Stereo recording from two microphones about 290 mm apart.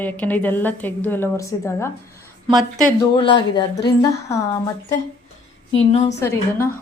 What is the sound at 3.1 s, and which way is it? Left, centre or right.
Speech, centre.